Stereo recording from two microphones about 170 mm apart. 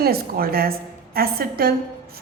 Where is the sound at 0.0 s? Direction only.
65° right (ahead or behind).